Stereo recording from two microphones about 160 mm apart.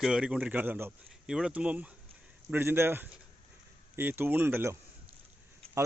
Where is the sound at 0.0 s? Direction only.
5° right (ahead or behind).